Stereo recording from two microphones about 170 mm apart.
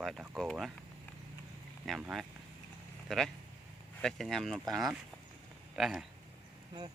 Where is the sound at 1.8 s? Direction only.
Centre (ahead or behind).